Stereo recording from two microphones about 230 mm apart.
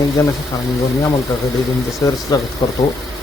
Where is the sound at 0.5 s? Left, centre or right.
Centre.